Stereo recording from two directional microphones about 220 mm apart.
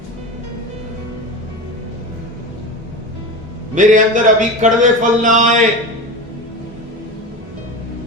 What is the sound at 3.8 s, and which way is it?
Speech, 35° right (ahead or behind).